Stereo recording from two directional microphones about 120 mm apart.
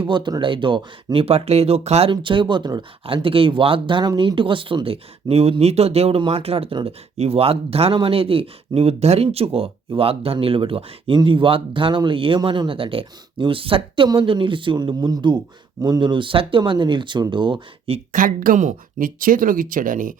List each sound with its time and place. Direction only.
0.0 s speech: 40° right (ahead or behind)
3.2 s speech: 50° right (ahead or behind)
18.1 s speech: 90° right
19.0 s speech: 70° right (ahead or behind)
19.8 s speech: 90° right